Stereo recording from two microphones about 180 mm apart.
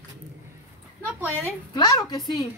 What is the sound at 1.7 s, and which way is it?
Speech, 20° left (ahead or behind).